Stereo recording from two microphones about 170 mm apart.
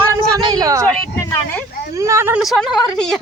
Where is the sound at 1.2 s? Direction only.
15° left (ahead or behind).